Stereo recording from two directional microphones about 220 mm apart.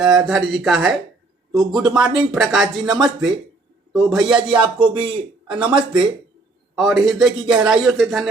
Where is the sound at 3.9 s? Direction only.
Centre (ahead or behind).